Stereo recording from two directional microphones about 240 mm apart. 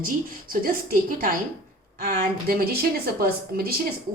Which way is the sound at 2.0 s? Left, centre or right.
Right.